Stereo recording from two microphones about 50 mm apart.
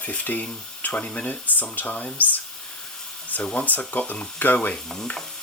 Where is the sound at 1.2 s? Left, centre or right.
Left.